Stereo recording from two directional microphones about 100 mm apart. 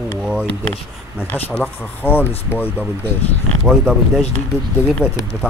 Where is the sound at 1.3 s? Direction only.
15° left (ahead or behind).